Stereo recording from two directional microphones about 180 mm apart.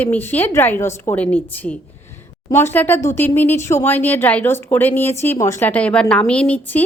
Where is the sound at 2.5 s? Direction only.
15° left (ahead or behind).